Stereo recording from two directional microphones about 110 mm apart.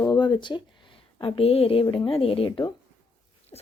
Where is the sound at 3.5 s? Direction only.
40° left (ahead or behind).